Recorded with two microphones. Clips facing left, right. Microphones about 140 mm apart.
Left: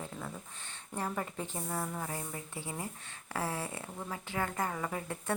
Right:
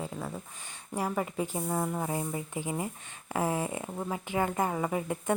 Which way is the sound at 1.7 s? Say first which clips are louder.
Right 5 dB; 20° right (ahead or behind).